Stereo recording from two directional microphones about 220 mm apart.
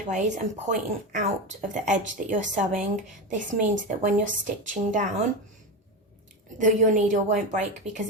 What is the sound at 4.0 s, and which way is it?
Speech, 35° right (ahead or behind).